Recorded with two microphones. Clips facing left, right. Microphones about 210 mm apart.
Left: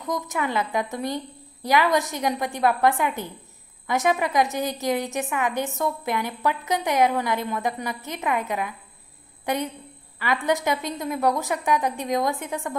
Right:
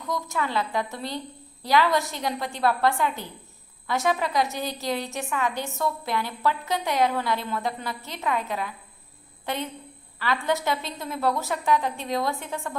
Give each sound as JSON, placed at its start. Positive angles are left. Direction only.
{"t": 0.0, "sound": "a woman's voice", "side_deg": 20}